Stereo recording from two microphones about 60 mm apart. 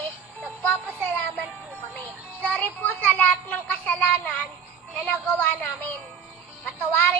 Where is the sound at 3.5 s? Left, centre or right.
Left.